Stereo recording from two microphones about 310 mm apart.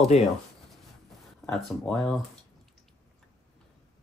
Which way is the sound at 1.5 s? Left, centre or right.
Centre.